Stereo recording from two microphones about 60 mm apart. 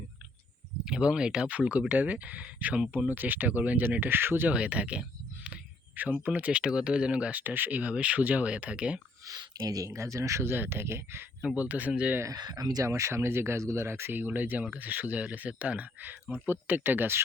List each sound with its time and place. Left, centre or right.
0.9 s speech: centre; by 4.4 s right
4.4 s speech: right
9.2 s speech: right
9.9 s speech: right
10.4 s speech: right
11.4 s speech: right
12.2 s speech: right
12.9 s speech: right